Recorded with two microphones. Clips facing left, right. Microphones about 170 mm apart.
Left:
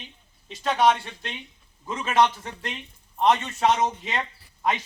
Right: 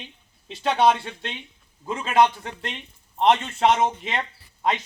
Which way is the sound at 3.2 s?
30° right (ahead or behind).